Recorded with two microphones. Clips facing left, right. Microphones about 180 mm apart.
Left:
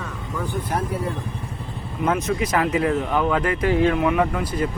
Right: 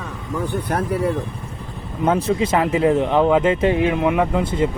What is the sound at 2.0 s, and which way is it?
Speech, 25° right (ahead or behind).